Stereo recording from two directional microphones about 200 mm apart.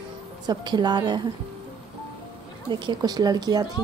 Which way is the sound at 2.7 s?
20° right (ahead or behind).